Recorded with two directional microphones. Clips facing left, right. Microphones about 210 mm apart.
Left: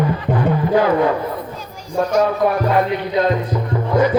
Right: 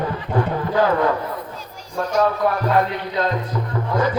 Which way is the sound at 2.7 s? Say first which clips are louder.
Left 3 dB; 15° left (ahead or behind).